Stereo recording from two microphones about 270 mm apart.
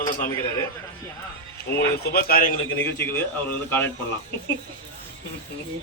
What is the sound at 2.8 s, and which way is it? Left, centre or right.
A man's voice, centre.